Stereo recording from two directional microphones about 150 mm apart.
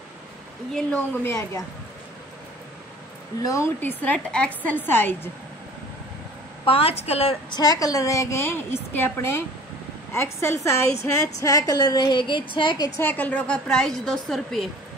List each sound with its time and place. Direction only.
0.7 s a woman's voice: 10° left (ahead or behind)
3.4 s a woman's voice: 20° left (ahead or behind)
6.6 s a woman's voice: 40° left (ahead or behind)
7.5 s a woman's voice: 25° left (ahead or behind)
13.0 s a woman's voice: 10° left (ahead or behind)